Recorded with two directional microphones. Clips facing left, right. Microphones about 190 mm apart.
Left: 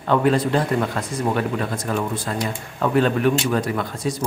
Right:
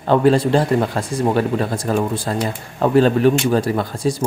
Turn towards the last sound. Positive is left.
turn(degrees=-30)  # may be behind; listen again after turning